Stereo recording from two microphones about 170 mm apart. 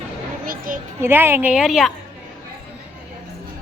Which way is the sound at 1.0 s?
15° right (ahead or behind).